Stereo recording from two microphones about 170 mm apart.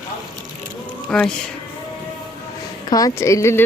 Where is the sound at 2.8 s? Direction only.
20° left (ahead or behind).